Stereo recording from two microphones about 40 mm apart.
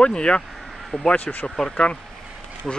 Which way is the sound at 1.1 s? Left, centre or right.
Left.